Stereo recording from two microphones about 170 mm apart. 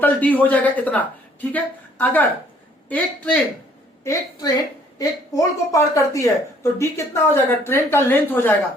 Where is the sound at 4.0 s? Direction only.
20° left (ahead or behind).